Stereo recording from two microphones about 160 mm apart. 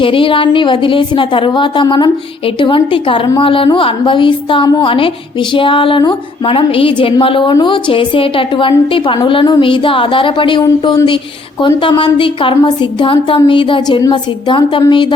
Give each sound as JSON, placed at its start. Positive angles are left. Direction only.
{"t": 0.0, "sound": "a woman's voice", "side_deg": 35}